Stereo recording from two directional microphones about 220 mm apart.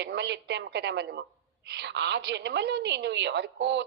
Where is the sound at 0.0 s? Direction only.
50° right (ahead or behind).